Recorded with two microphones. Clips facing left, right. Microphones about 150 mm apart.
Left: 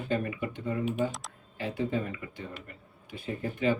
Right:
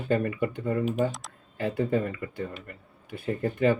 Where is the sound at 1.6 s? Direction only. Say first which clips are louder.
Right 5 dB; 60° right (ahead or behind).